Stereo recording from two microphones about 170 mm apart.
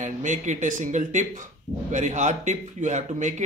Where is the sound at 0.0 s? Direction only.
45° right (ahead or behind).